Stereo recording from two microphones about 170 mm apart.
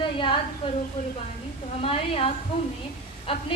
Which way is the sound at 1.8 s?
35° left (ahead or behind).